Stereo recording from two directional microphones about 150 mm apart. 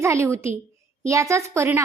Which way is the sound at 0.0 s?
20° right (ahead or behind).